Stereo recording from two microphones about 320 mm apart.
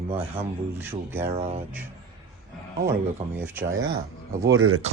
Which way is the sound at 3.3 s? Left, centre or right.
Centre.